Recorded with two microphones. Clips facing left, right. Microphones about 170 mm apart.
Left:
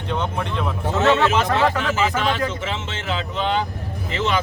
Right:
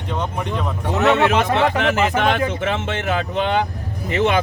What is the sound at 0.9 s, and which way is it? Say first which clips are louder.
Speech: right 2 dB; 15° right (ahead or behind).